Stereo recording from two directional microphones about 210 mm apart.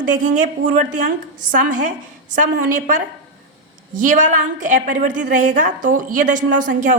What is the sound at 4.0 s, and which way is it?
A woman's voice, 35° right (ahead or behind).